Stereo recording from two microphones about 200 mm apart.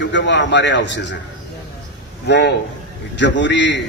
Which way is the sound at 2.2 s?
60° left (ahead or behind).